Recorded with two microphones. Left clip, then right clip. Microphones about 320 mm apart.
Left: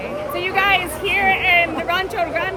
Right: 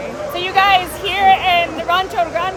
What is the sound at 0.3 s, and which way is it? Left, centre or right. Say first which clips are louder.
Speech: right 4 dB; centre.